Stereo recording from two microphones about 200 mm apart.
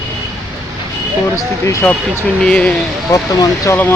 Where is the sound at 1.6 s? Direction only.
15° left (ahead or behind).